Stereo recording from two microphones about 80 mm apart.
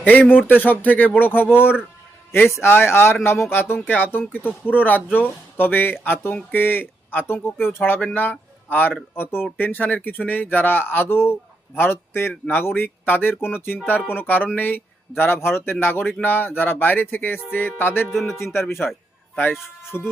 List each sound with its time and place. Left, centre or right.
0.0 s speech: left
18.1 s a man's voice: centre
18.6 s speech: left
19.9 s speech: left